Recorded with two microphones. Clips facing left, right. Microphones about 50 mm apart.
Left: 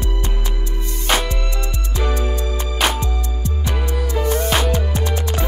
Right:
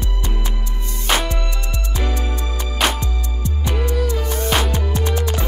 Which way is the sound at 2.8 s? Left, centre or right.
Centre.